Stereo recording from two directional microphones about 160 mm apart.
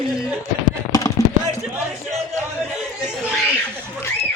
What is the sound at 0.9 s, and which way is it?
Chopping, 20° left (ahead or behind).